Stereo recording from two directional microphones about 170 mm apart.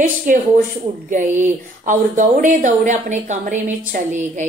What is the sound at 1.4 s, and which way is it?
A woman's voice, 45° right (ahead or behind).